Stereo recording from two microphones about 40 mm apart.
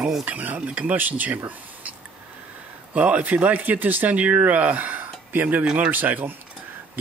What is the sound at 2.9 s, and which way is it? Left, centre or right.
A man's voice, right.